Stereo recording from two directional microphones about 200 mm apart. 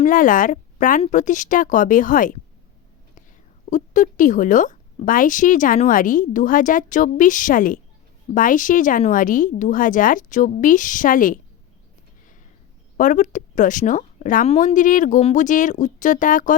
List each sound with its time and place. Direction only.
0.0 s speech: 40° left (ahead or behind)
3.7 s speech: 40° left (ahead or behind)
13.0 s speech: 40° left (ahead or behind)